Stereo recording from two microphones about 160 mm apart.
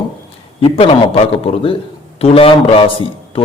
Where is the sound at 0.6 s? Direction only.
35° left (ahead or behind).